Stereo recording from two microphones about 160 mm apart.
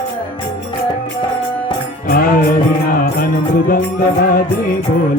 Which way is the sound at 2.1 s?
60° left (ahead or behind).